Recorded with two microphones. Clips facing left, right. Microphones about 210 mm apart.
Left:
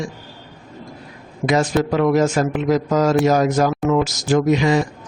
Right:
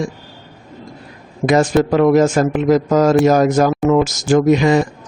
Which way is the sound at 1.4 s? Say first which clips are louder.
Right 4 dB; 50° right (ahead or behind).